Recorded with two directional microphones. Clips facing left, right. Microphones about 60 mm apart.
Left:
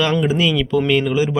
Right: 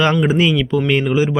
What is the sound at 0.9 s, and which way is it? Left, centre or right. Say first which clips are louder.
Speech: right 2 dB; centre.